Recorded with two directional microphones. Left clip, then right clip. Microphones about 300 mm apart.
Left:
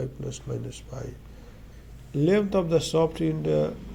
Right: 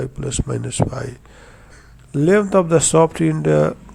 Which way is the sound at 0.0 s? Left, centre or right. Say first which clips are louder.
Right 9 dB; right.